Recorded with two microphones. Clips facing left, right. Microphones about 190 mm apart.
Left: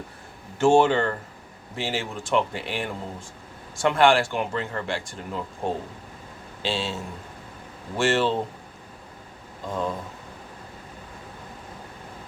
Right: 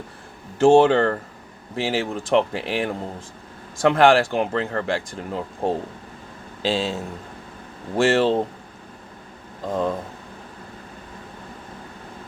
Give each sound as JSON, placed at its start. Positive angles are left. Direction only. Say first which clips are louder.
{"t": 0.6, "sound": "speech", "louder": "right 4 dB", "side_deg": -35}
{"t": 9.6, "sound": "speech", "louder": "right 5 dB", "side_deg": -45}